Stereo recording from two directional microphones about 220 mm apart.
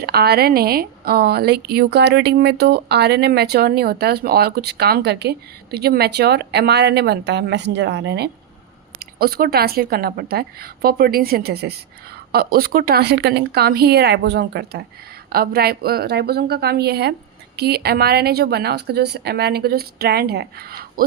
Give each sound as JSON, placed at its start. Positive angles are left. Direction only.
{"t": 0.0, "sound": "a woman's voice", "side_deg": -45}